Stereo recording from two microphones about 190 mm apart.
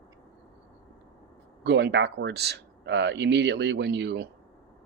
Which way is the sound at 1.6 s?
65° right (ahead or behind).